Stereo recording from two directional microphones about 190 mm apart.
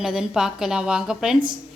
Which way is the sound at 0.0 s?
Centre (ahead or behind).